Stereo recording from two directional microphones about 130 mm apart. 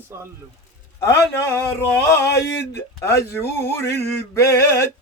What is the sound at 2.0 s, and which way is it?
Male singing, 20° left (ahead or behind).